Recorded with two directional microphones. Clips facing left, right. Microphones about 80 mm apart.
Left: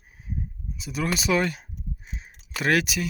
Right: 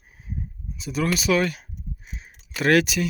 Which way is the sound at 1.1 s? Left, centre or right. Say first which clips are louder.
Right 1 dB; left.